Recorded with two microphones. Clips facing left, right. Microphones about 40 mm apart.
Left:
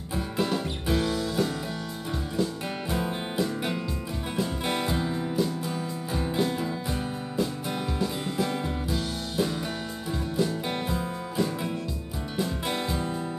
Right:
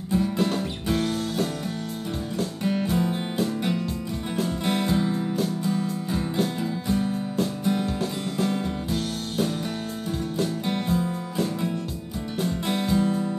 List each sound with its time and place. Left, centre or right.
0.9 s music: right
2.6 s music: centre
4.6 s music: centre
6.1 s music: left
6.6 s music: centre
10.6 s music: centre